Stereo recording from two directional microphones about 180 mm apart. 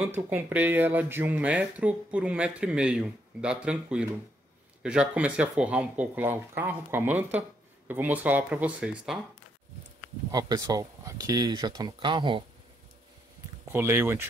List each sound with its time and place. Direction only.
0.0 s speech: 10° right (ahead or behind)
10.3 s speech: 20° right (ahead or behind)
13.7 s speech: 15° right (ahead or behind)